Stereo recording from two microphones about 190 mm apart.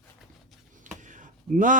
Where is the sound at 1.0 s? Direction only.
40° right (ahead or behind).